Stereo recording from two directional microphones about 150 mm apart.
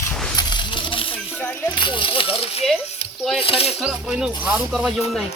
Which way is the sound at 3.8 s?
5° right (ahead or behind).